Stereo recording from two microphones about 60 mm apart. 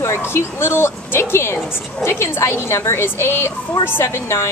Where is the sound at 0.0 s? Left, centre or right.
Left.